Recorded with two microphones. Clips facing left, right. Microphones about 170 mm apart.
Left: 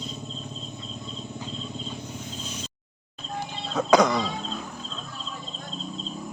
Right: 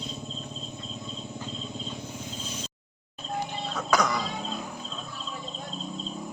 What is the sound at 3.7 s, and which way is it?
Music, 25° left (ahead or behind).